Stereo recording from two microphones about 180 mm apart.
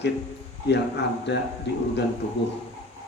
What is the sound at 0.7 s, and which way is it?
Speech, 70° left (ahead or behind).